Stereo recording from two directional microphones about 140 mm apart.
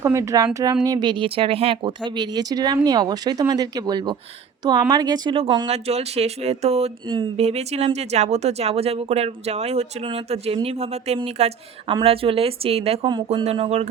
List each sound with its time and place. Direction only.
0.0 s speech: 20° right (ahead or behind); by 13.1 s 45° right (ahead or behind)
13.1 s speech: 35° right (ahead or behind)
13.4 s speech: 45° right (ahead or behind)